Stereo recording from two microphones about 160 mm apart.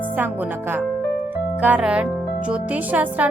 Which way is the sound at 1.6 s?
10° right (ahead or behind).